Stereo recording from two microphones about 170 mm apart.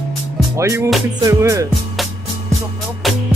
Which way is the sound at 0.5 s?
15° right (ahead or behind).